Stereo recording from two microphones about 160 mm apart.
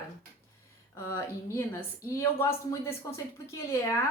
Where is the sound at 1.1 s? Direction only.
15° left (ahead or behind).